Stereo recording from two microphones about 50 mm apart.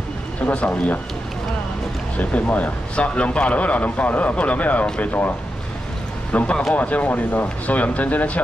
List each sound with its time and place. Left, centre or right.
0.5 s speech: left
2.1 s a man's voice: left
6.3 s a man's voice: left